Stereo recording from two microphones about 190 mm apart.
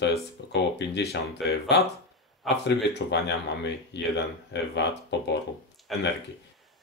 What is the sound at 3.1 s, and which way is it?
Speech, 65° left (ahead or behind).